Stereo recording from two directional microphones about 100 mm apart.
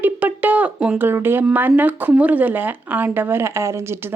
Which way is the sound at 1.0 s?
20° right (ahead or behind).